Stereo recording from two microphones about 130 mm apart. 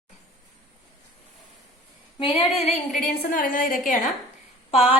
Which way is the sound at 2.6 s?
60° left (ahead or behind).